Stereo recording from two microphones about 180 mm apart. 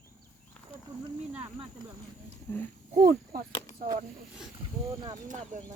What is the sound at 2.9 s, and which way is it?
Speech, 50° right (ahead or behind).